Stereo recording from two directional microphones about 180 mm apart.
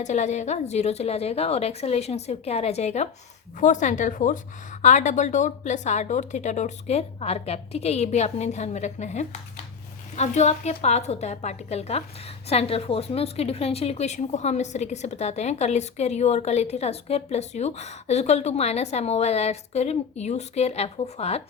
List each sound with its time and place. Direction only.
0.0 s a woman's voice: 40° left (ahead or behind)